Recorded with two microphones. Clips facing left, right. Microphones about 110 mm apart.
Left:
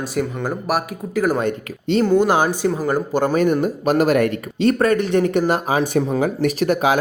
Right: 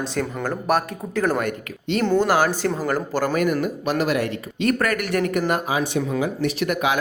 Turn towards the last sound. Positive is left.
turn(degrees=35)  # may be behind; listen again after turning